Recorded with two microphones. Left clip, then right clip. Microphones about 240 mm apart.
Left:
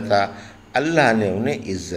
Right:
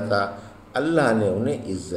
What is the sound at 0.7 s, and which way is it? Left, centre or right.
A man's voice, left.